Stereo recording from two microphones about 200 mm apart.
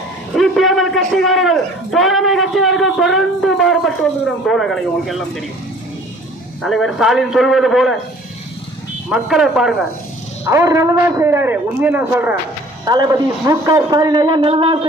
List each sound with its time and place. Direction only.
0.3 s a sound: centre (ahead or behind)
1.1 s a man's voice: centre (ahead or behind)
6.6 s a man's voice: centre (ahead or behind)
9.0 s a man's voice: 5° right (ahead or behind)
10.4 s a man's voice: 15° right (ahead or behind)